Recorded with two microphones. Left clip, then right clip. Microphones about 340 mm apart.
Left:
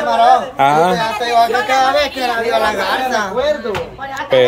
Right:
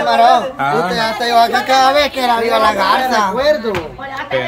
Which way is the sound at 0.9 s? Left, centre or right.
Right.